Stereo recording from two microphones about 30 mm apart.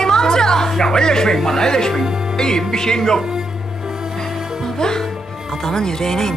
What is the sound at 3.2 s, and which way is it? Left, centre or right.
Music, centre.